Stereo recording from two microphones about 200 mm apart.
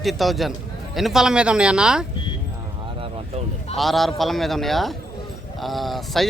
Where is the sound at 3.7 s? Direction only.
Centre (ahead or behind).